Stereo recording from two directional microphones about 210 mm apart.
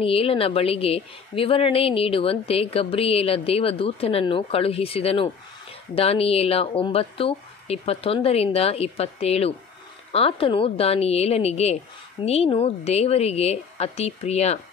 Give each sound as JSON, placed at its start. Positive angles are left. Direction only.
{"t": 0.0, "sound": "a woman's voice", "side_deg": 25}